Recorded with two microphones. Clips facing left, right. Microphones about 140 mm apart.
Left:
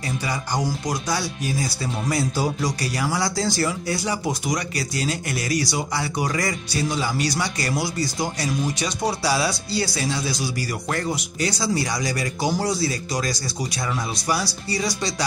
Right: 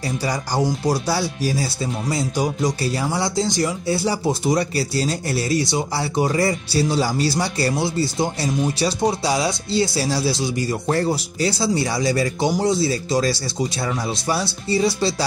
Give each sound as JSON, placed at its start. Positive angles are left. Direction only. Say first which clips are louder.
{"t": 0.2, "sound": "speech", "louder": "right 5 dB", "side_deg": -35}